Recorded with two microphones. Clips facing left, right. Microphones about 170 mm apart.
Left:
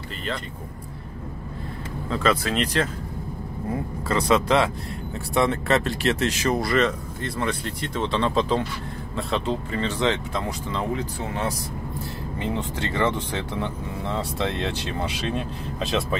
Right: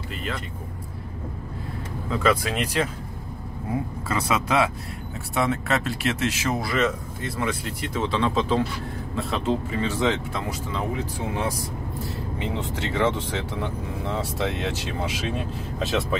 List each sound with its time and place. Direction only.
2.0 s speech: 10° right (ahead or behind)
4.1 s speech: 10° right (ahead or behind)
12.5 s speech: centre (ahead or behind)